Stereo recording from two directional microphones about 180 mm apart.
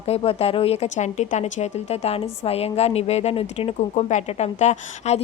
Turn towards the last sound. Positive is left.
turn(degrees=40)  # may be behind; listen again after turning